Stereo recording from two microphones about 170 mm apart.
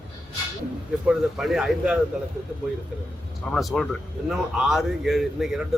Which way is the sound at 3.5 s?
Centre (ahead or behind).